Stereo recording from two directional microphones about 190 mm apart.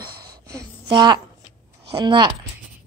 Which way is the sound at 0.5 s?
20° right (ahead or behind).